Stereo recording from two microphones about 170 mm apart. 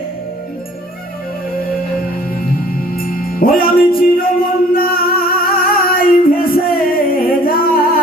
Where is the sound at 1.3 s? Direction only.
60° left (ahead or behind).